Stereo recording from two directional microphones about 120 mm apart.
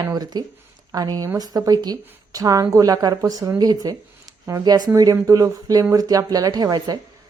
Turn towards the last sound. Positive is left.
turn(degrees=-35)  # may be behind; listen again after turning